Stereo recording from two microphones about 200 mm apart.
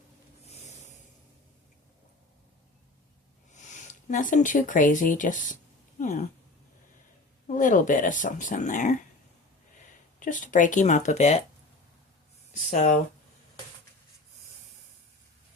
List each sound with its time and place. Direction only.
0.4 s a sound: 35° left (ahead or behind)
4.1 s speech: 40° left (ahead or behind)
7.4 s speech: 40° left (ahead or behind)
10.2 s speech: 40° left (ahead or behind)
12.7 s speech: 35° left (ahead or behind)